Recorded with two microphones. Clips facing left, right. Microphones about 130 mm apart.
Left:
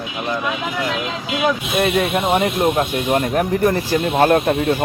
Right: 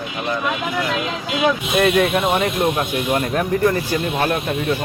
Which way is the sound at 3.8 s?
40° left (ahead or behind).